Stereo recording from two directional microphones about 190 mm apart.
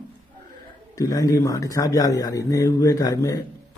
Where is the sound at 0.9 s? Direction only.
20° left (ahead or behind).